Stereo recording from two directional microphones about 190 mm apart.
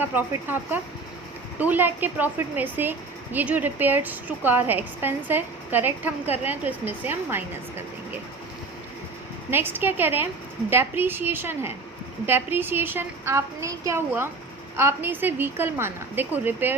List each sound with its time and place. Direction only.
0.0 s a woman's voice: 10° right (ahead or behind)
9.5 s a woman's voice: 10° right (ahead or behind)